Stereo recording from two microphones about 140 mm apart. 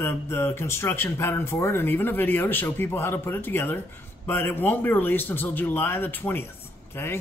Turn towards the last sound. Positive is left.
turn(degrees=15)  # may be behind; listen again after turning